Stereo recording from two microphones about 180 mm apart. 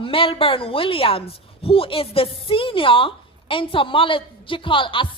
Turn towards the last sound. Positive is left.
turn(degrees=30)  # may be behind; listen again after turning